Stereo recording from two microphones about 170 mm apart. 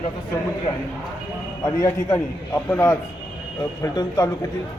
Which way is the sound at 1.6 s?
15° left (ahead or behind).